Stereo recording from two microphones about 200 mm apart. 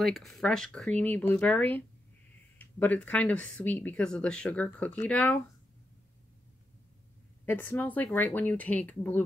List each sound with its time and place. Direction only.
0.0 s speech: centre (ahead or behind)
7.4 s speech: 10° left (ahead or behind)